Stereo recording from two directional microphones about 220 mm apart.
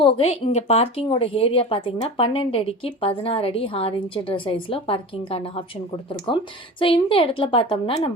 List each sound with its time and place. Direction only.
0.0 s a woman's voice: 25° left (ahead or behind)